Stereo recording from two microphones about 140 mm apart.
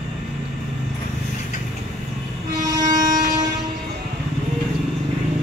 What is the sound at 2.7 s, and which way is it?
Vehicle, 30° right (ahead or behind).